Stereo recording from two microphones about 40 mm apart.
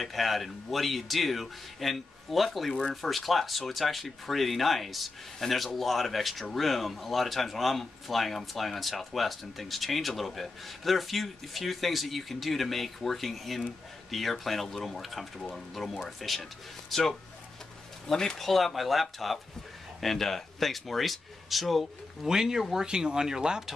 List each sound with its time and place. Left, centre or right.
0.0 s speech: centre
18.0 s speech: centre
22.3 s speech: centre